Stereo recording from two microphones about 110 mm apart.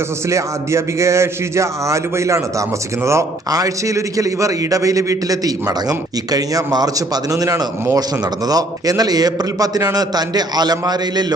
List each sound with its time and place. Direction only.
0.3 s a man's voice: 25° right (ahead or behind)